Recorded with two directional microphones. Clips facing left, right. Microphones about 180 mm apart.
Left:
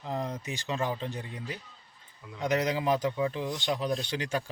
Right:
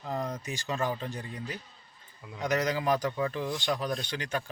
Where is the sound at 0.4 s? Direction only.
20° left (ahead or behind).